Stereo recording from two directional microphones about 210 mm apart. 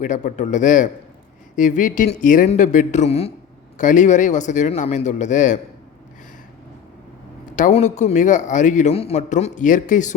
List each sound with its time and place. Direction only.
0.0 s a man's voice: 35° left (ahead or behind)
7.5 s a man's voice: 35° left (ahead or behind)